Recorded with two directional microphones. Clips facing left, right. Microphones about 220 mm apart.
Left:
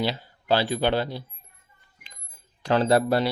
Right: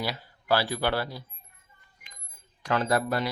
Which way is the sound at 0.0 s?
25° left (ahead or behind).